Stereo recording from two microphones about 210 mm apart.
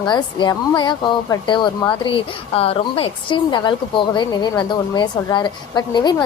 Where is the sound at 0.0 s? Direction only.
20° left (ahead or behind).